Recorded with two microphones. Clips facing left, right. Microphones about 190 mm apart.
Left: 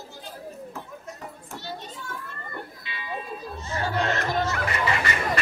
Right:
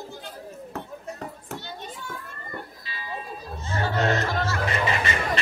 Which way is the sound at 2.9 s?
35° right (ahead or behind).